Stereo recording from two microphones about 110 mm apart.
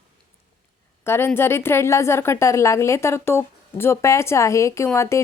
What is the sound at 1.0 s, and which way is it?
Speech, 20° left (ahead or behind).